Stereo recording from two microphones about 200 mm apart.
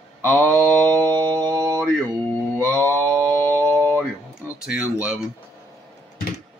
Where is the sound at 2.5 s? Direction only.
5° left (ahead or behind).